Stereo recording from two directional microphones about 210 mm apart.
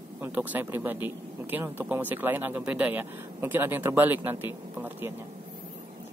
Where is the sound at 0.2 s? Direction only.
10° right (ahead or behind).